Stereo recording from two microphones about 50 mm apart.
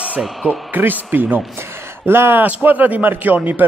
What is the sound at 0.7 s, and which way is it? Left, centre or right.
Speech, right.